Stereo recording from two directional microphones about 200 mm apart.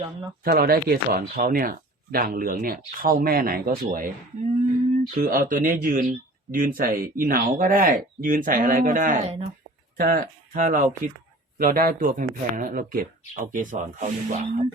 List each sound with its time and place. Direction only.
0.4 s speech: 45° right (ahead or behind)